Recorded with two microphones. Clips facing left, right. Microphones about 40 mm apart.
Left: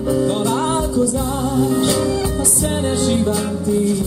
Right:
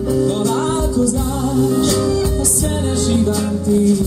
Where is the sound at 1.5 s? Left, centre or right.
Centre.